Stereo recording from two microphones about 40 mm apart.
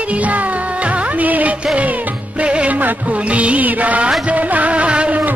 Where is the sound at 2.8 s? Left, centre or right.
Right.